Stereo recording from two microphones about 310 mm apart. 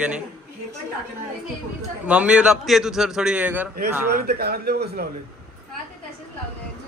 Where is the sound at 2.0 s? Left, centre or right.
Centre.